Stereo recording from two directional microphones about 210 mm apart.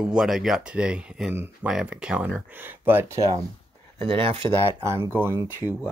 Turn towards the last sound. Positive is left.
turn(degrees=-10)  # may be behind; listen again after turning